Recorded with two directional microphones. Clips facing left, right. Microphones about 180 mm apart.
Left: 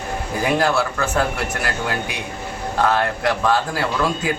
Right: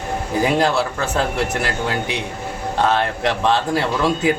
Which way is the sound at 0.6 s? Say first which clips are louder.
Right 1 dB; 25° right (ahead or behind).